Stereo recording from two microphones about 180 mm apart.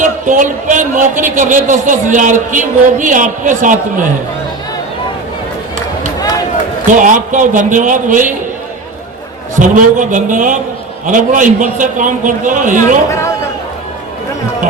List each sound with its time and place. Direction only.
0.0 s speech: 45° right (ahead or behind)
7.0 s speech: 45° right (ahead or behind)
9.6 s speech: 45° right (ahead or behind)